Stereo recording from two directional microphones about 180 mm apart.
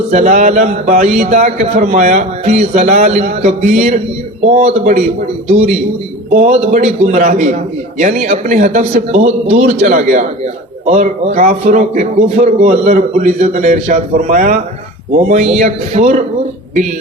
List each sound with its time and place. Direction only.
0.1 s a man's voice: 40° right (ahead or behind)
15.6 s a man's voice: 40° right (ahead or behind)